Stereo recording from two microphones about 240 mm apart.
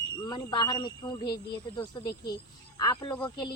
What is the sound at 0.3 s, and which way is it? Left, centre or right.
Speech, centre.